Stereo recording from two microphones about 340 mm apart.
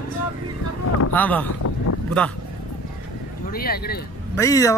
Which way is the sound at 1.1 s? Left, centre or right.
Centre.